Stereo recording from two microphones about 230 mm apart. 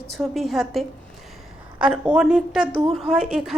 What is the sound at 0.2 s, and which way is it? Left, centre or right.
A woman's voice, centre.